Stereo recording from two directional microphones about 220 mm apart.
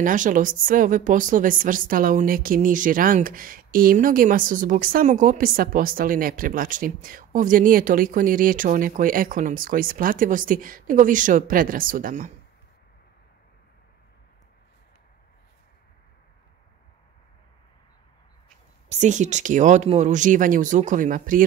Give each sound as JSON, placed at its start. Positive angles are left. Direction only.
{"t": 0.0, "sound": "a woman's voice", "side_deg": -35}
{"t": 18.9, "sound": "a woman's voice", "side_deg": -35}